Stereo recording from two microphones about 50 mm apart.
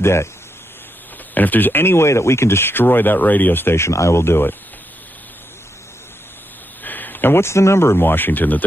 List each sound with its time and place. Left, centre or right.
0.0 s speech: left
1.3 s speech: left
3.7 s speech: left
6.8 s speech: left
8.0 s speech: left